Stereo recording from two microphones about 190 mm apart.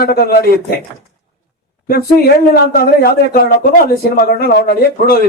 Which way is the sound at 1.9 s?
55° left (ahead or behind).